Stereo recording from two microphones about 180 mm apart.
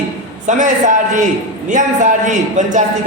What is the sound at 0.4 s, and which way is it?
A man's voice, 45° right (ahead or behind).